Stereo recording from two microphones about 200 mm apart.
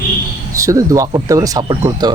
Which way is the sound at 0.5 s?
15° right (ahead or behind).